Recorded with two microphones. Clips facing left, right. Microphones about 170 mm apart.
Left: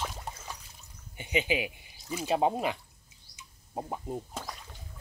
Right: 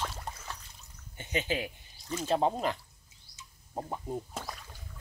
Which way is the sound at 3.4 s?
5° left (ahead or behind).